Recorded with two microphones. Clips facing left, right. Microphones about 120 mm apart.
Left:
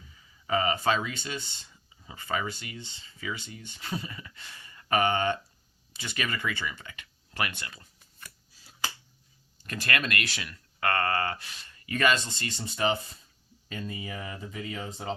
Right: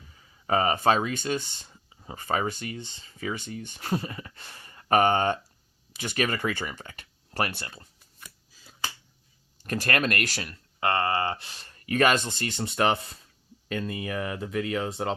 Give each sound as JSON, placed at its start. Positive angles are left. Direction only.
{"t": 0.1, "sound": "speech", "side_deg": -45}
{"t": 9.6, "sound": "speech", "side_deg": -45}
{"t": 10.8, "sound": "speech", "side_deg": -20}